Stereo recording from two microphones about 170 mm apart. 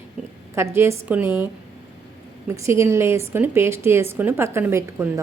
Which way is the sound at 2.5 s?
15° right (ahead or behind).